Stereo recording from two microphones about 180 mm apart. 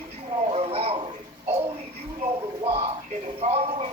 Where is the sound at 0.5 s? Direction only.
35° right (ahead or behind).